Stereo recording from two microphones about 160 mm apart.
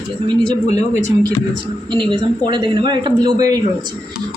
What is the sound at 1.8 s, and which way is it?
Speech, 30° right (ahead or behind).